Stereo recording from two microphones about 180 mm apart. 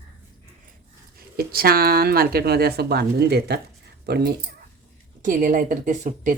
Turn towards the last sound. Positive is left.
turn(degrees=-45)  # may be behind; listen again after turning